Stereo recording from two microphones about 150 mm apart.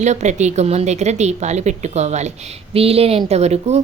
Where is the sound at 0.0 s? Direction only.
50° right (ahead or behind).